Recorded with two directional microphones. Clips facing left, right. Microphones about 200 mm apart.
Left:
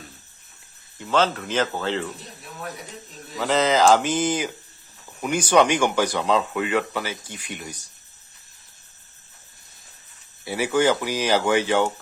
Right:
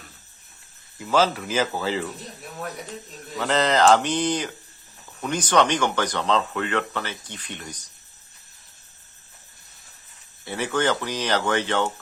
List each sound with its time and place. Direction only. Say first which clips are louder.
0.9 s speech: right 1 dB; 5° right (ahead or behind)
3.3 s speech: left 1 dB; centre (ahead or behind)
10.4 s speech: left 4 dB; 10° left (ahead or behind)